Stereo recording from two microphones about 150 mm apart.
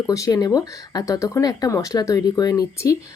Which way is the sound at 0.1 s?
20° left (ahead or behind).